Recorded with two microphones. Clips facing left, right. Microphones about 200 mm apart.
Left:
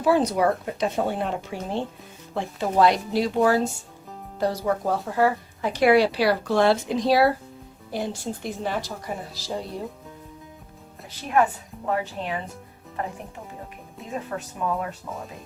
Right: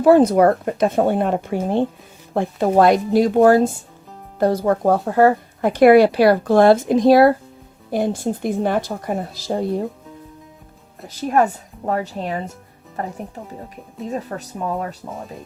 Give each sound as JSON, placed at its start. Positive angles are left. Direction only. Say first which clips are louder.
{"t": 0.0, "sound": "speech", "louder": "right 8 dB", "side_deg": -50}
{"t": 11.1, "sound": "speech", "louder": "right 4 dB", "side_deg": -40}